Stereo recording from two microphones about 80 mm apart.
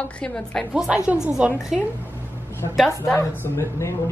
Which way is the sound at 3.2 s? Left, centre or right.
Left.